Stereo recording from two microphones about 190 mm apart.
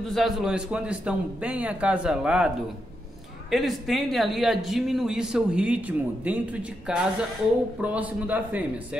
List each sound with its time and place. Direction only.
0.0 s a man's voice: centre (ahead or behind)